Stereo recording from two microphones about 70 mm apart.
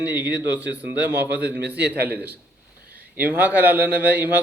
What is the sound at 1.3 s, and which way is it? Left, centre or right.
Speech, right.